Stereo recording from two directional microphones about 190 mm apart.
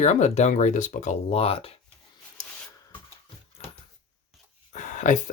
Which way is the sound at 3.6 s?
30° left (ahead or behind).